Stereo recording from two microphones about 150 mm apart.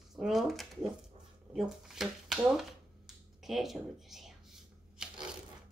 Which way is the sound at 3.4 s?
Centre (ahead or behind).